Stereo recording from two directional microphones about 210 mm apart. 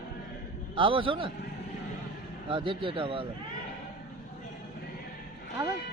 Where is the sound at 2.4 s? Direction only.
25° right (ahead or behind).